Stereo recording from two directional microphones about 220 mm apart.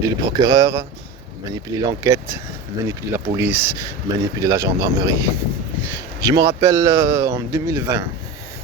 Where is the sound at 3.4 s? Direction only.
10° right (ahead or behind).